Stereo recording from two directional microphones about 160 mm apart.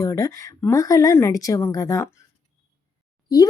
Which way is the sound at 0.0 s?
20° left (ahead or behind).